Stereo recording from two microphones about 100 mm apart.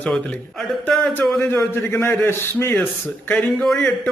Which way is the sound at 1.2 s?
20° left (ahead or behind).